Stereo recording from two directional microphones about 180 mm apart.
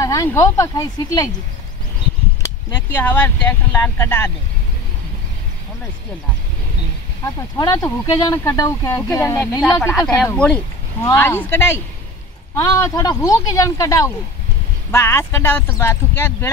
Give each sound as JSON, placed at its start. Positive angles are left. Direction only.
{"t": 0.0, "sound": "speech", "side_deg": 15}
{"t": 2.4, "sound": "speech", "side_deg": 10}
{"t": 7.5, "sound": "speech", "side_deg": 20}
{"t": 9.8, "sound": "speech", "side_deg": 5}